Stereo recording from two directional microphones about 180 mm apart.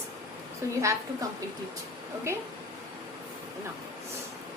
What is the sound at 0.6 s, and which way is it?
Speech, 15° right (ahead or behind).